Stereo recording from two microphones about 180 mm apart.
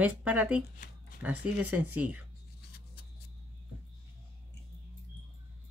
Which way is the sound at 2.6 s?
60° left (ahead or behind).